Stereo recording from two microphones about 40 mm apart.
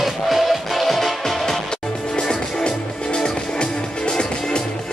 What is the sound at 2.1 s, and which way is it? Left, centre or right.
Music, left.